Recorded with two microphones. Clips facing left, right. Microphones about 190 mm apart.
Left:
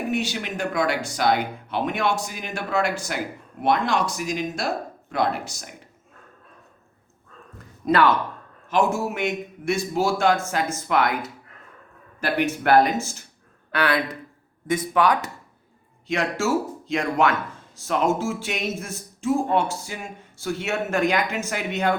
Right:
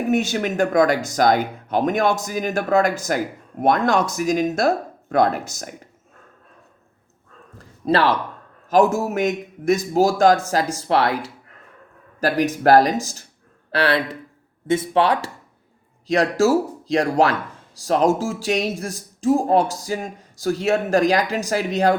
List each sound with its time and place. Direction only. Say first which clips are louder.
0.1 s speech: right 6 dB; 45° right (ahead or behind)
7.6 s a sound: right 1 dB; 30° right (ahead or behind)
8.7 s speech: right 5 dB; 40° right (ahead or behind)